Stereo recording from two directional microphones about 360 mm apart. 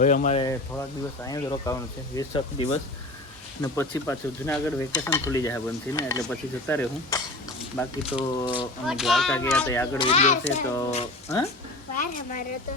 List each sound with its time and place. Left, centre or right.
0.0 s speech: left
1.2 s stir: centre
7.6 s speech: centre
8.4 s stir: centre
8.9 s stir: centre